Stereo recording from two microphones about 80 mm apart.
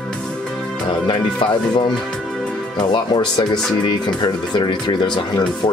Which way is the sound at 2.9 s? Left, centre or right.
Left.